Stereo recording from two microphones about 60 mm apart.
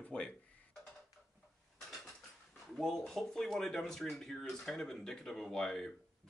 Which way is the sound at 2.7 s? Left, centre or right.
Centre.